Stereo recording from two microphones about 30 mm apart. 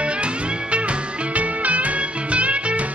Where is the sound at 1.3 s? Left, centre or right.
Right.